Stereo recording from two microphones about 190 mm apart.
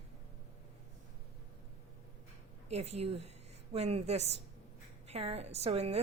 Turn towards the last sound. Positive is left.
turn(degrees=-35)  # may be behind; listen again after turning